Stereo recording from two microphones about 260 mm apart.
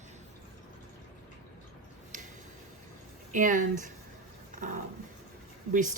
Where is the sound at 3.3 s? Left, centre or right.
Right.